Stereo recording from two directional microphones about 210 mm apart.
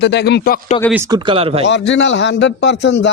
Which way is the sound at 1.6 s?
55° left (ahead or behind).